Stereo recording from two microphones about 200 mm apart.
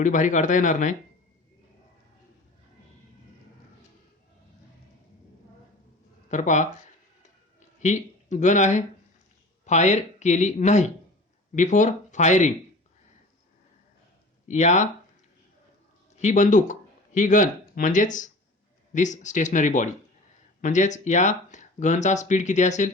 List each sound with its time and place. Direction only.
0.0 s speech: 40° left (ahead or behind)
6.2 s speech: 35° left (ahead or behind)
7.8 s speech: 35° left (ahead or behind)
14.4 s speech: 35° left (ahead or behind)
16.1 s speech: 35° left (ahead or behind)